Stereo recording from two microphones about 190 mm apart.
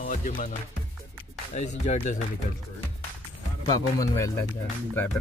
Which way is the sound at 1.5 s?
40° left (ahead or behind).